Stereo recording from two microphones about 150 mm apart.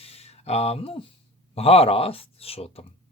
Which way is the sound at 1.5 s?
40° left (ahead or behind).